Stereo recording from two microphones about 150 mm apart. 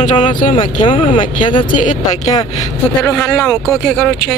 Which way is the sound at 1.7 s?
60° left (ahead or behind).